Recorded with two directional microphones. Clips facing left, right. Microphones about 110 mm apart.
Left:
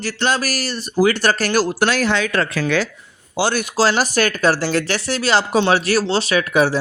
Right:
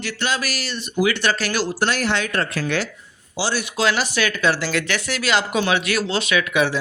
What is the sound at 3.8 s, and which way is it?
Speech, 40° left (ahead or behind).